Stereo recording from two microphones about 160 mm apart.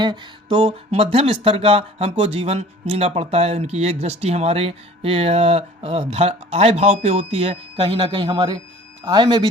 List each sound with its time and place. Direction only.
0.4 s speech: 40° right (ahead or behind)